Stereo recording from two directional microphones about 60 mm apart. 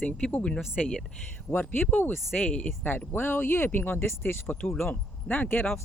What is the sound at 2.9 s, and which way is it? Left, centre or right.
Speech, left.